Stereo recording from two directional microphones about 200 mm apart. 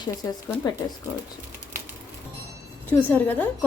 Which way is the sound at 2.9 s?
10° left (ahead or behind).